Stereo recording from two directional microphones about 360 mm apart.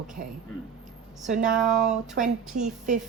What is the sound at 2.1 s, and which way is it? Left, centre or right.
Speech, right.